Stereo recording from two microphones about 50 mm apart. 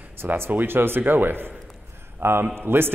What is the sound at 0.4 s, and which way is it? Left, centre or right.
A man's voice, right.